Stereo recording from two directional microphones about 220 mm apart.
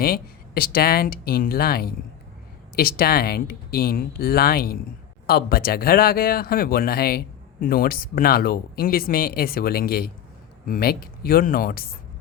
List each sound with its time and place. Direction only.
0.0 s speech: 45° left (ahead or behind)